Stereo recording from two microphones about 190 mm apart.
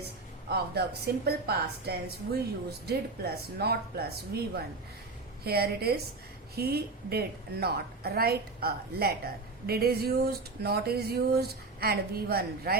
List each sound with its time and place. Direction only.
0.5 s a woman's voice: 55° right (ahead or behind)